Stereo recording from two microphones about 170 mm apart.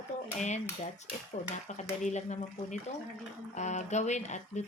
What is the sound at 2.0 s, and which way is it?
Speech, 45° left (ahead or behind).